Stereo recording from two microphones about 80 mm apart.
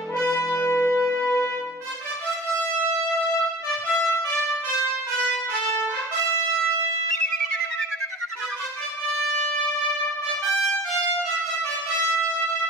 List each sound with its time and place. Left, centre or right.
0.4 s music: left
0.7 s music: left
5.6 s trumpet: centre